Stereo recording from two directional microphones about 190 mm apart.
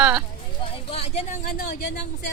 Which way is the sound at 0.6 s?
30° left (ahead or behind).